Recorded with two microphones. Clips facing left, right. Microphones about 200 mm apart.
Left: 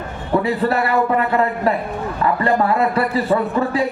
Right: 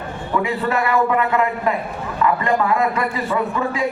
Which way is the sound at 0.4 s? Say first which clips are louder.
Left 2 dB; 35° left (ahead or behind).